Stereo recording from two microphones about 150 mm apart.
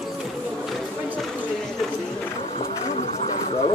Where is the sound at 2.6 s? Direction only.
40° left (ahead or behind).